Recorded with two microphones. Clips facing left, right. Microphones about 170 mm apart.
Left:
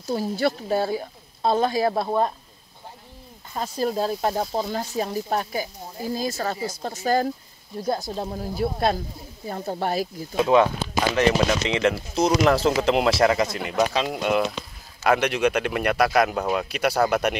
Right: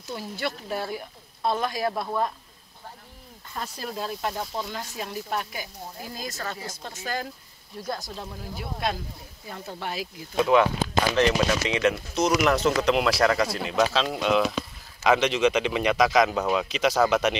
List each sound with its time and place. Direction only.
0.0 s speech: 40° left (ahead or behind)
3.5 s speech: 30° left (ahead or behind)
7.8 s speech: 25° left (ahead or behind)
8.1 s speech: 40° left (ahead or behind)
10.3 s speech: 20° left (ahead or behind)
13.7 s speech: 10° left (ahead or behind)